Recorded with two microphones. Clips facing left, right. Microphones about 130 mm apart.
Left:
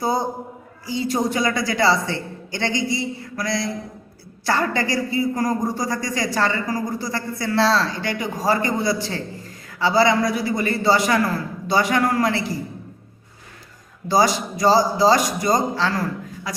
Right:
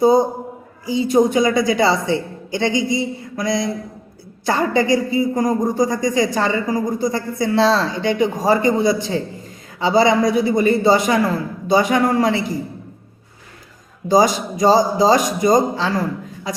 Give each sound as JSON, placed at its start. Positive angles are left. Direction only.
{"t": 0.0, "sound": "speech", "side_deg": -20}
{"t": 14.1, "sound": "speech", "side_deg": -20}